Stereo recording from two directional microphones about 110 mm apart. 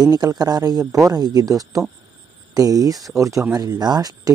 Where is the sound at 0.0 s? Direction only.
35° right (ahead or behind).